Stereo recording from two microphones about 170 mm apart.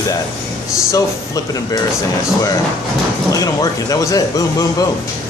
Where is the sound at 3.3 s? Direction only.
20° left (ahead or behind).